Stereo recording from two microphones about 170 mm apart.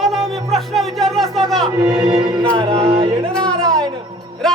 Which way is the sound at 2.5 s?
35° right (ahead or behind).